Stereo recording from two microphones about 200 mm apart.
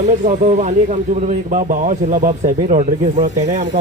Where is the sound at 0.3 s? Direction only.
35° right (ahead or behind).